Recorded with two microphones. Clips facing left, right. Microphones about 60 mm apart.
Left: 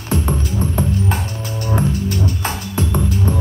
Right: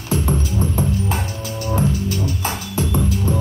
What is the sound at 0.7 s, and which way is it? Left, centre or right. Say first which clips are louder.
Music: left 1 dB; left.